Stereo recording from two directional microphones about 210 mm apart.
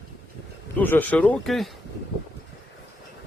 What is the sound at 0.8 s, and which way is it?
Speech, 10° left (ahead or behind).